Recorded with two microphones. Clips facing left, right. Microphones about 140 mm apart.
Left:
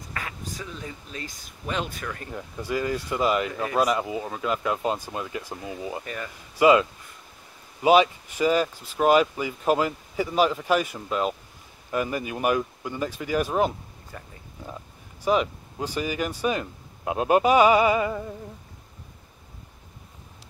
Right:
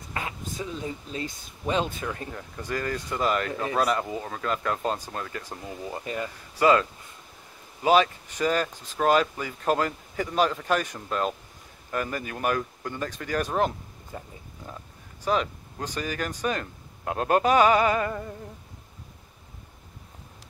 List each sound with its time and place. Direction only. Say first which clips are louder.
0.1 s speech: right 2 dB; 25° right (ahead or behind)
2.3 s speech: left 3 dB; 10° left (ahead or behind)
6.0 s speech: right 3 dB; 20° right (ahead or behind)
6.6 s speech: left 3 dB; 10° left (ahead or behind)
14.1 s speech: right 3 dB; 20° right (ahead or behind)
15.2 s speech: left 3 dB; 10° left (ahead or behind)